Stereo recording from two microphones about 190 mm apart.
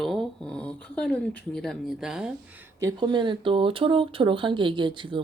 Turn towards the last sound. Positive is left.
turn(degrees=-25)  # may be behind; listen again after turning